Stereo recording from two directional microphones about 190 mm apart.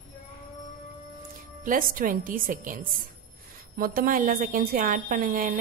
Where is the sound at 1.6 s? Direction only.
45° right (ahead or behind).